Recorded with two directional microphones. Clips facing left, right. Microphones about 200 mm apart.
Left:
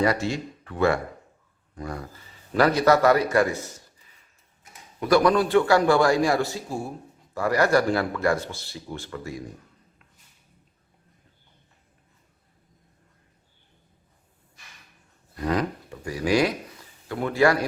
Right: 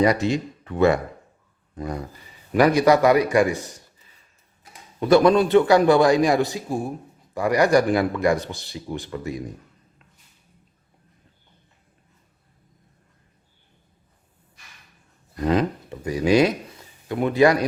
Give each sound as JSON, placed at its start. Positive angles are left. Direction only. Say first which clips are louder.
{"t": 0.0, "sound": "a man's voice", "louder": "right 4 dB", "side_deg": -20}
{"t": 4.6, "sound": "a man's voice", "louder": "right 4 dB", "side_deg": -25}
{"t": 15.4, "sound": "speech", "louder": "right 4 dB", "side_deg": -25}